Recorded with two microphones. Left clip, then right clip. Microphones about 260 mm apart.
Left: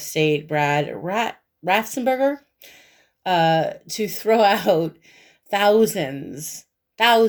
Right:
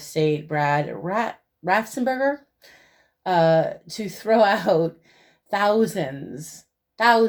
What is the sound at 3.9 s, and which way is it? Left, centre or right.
Speech, left.